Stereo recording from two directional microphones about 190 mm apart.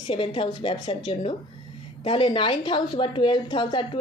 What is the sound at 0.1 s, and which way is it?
A woman's voice, 30° left (ahead or behind).